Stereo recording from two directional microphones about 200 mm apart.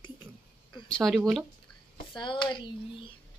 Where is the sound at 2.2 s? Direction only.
25° left (ahead or behind).